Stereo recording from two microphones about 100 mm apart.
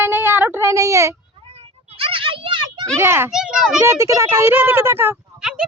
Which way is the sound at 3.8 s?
30° right (ahead or behind).